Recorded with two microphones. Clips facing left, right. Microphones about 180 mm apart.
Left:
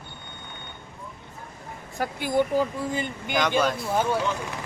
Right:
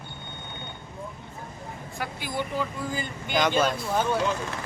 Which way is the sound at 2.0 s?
50° left (ahead or behind).